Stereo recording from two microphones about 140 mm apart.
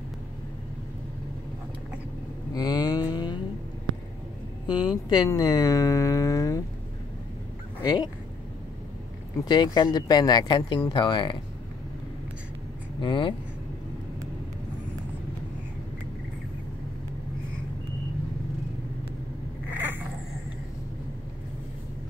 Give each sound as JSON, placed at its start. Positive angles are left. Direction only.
{"t": 2.5, "sound": "a sound", "side_deg": 30}
{"t": 4.6, "sound": "speech", "side_deg": 35}
{"t": 7.8, "sound": "speech", "side_deg": 30}
{"t": 9.4, "sound": "speech", "side_deg": 30}
{"t": 13.0, "sound": "speech", "side_deg": 35}
{"t": 19.7, "sound": "cat", "side_deg": -15}